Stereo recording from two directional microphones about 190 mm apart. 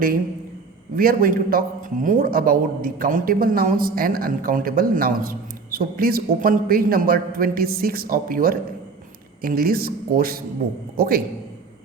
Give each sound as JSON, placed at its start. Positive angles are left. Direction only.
{"t": 0.9, "sound": "a man's voice", "side_deg": -50}